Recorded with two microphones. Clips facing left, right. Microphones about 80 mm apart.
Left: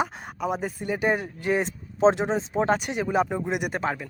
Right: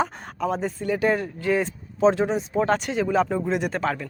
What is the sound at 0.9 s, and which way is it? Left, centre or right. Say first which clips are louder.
Speech: right 2 dB; centre.